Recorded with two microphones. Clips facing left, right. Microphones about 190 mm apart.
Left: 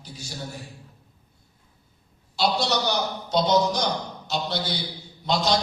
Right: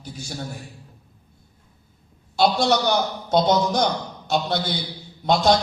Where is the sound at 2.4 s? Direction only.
50° right (ahead or behind).